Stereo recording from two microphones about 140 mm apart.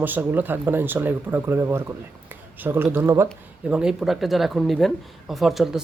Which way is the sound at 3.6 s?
5° right (ahead or behind).